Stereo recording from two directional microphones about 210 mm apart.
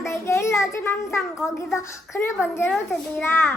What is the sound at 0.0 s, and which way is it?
Child singing, 15° left (ahead or behind).